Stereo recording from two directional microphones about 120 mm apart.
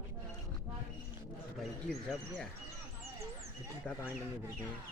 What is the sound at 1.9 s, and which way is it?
Speech, 5° left (ahead or behind).